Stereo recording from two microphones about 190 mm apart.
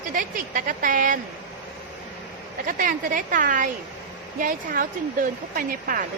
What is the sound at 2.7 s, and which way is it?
Speech, 45° right (ahead or behind).